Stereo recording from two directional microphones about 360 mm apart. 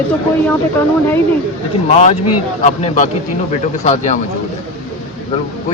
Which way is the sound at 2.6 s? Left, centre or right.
Centre.